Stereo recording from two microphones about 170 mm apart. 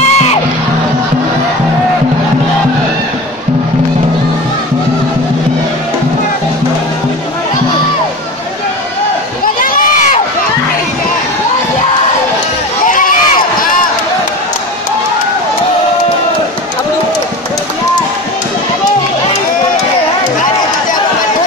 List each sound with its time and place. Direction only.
0.1 s music: 40° left (ahead or behind)
9.6 s run: 50° left (ahead or behind)
12.8 s run: 55° left (ahead or behind)